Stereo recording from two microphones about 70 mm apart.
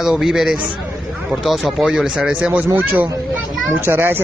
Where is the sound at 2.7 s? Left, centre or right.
Right.